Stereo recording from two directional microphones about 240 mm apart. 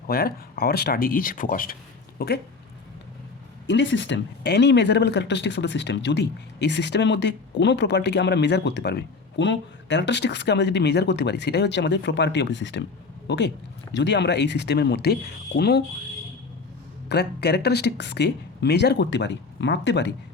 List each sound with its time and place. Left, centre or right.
0.1 s speech: left
3.7 s speech: left
17.1 s speech: left